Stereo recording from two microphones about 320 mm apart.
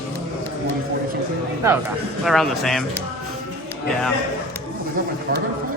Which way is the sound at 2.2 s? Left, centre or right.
Centre.